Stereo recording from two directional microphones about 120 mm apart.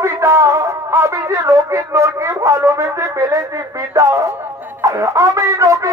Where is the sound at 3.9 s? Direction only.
30° right (ahead or behind).